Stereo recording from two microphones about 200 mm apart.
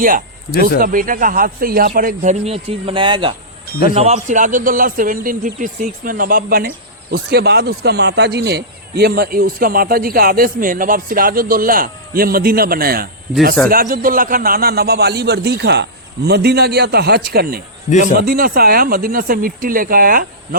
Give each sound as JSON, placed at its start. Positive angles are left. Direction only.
{"t": 0.8, "sound": "speech", "side_deg": -45}